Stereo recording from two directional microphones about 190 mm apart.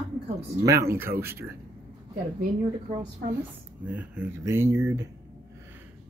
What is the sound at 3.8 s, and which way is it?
Speech, 5° right (ahead or behind).